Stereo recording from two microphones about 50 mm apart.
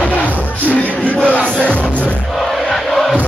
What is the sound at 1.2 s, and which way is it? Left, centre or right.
Music, left.